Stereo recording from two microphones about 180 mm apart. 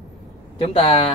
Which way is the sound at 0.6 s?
30° left (ahead or behind).